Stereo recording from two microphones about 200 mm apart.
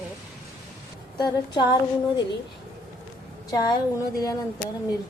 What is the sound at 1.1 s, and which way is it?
Speech, 20° left (ahead or behind).